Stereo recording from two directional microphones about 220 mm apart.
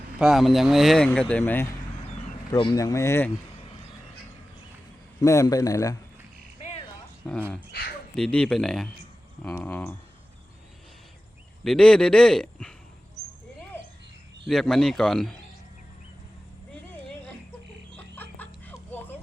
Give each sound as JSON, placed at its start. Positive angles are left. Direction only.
{"t": 0.2, "sound": "speech", "side_deg": 0}
{"t": 5.2, "sound": "speech", "side_deg": 15}
{"t": 7.2, "sound": "speech", "side_deg": 5}
{"t": 7.7, "sound": "speech", "side_deg": 45}
{"t": 8.1, "sound": "speech", "side_deg": 5}
{"t": 11.6, "sound": "speech", "side_deg": 5}
{"t": 14.4, "sound": "speech", "side_deg": 0}
{"t": 17.9, "sound": "a sound", "side_deg": 10}